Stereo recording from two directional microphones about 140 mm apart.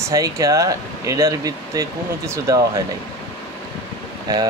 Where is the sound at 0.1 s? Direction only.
25° right (ahead or behind).